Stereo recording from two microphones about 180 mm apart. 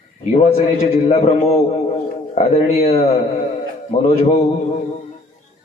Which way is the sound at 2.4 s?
50° left (ahead or behind).